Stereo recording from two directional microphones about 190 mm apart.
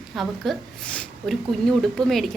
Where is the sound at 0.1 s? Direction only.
Centre (ahead or behind).